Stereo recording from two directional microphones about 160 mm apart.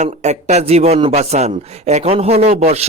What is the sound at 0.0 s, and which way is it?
A man's voice, 45° right (ahead or behind).